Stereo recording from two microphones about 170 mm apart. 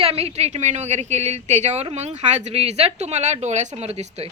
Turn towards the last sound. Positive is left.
turn(degrees=-35)  # may be behind; listen again after turning